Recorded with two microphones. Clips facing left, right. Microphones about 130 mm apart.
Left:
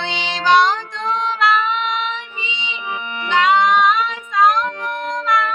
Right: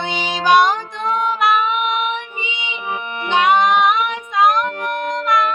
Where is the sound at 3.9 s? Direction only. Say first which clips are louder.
Right 1 dB; 65° right (ahead or behind).